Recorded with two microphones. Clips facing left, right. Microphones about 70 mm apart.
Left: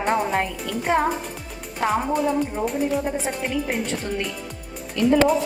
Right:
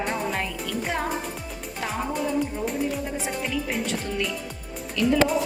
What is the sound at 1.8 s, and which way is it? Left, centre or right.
Music, left.